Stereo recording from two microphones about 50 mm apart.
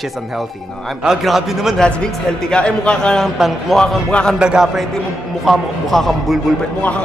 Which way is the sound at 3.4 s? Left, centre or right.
Centre.